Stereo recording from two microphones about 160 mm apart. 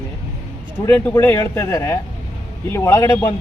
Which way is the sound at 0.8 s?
10° left (ahead or behind).